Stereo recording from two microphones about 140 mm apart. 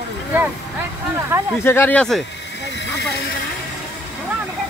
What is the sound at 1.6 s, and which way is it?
Speech, 15° left (ahead or behind).